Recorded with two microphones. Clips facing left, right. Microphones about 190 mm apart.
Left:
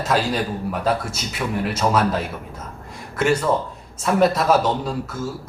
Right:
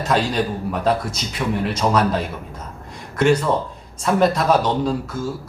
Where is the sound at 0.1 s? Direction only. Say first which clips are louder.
Right 2 dB; 5° left (ahead or behind).